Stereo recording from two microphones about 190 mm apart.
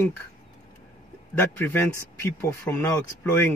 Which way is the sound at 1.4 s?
10° left (ahead or behind).